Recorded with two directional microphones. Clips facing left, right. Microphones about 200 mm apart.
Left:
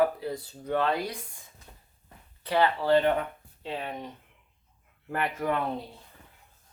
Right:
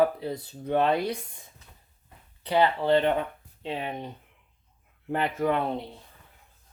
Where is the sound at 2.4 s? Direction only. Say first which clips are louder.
Right 1 dB; 20° right (ahead or behind).